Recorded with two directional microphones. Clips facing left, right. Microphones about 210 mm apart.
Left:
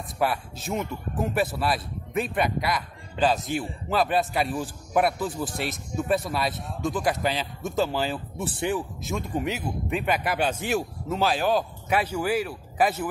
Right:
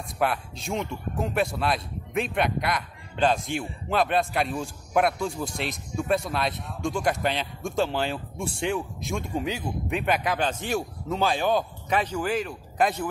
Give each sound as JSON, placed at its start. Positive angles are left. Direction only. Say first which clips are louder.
{"t": 0.2, "sound": "speech", "louder": "even", "side_deg": 5}